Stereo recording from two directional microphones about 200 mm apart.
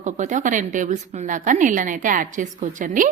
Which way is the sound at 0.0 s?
40° right (ahead or behind).